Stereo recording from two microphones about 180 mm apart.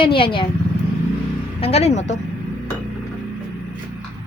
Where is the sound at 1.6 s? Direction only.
35° left (ahead or behind).